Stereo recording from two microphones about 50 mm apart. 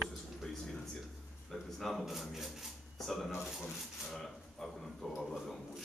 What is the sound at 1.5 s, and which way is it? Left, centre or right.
A man's voice, centre.